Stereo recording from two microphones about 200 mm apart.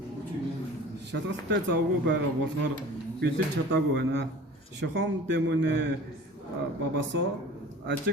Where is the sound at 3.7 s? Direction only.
60° right (ahead or behind).